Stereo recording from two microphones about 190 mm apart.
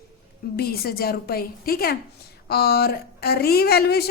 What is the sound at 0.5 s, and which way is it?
A woman's voice, 55° left (ahead or behind).